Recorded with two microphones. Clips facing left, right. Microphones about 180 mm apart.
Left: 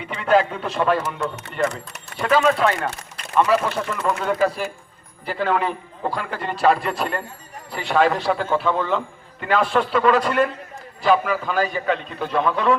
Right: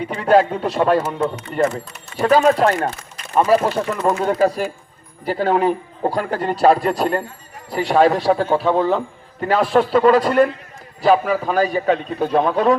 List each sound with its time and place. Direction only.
0.1 s a man's voice: 40° right (ahead or behind)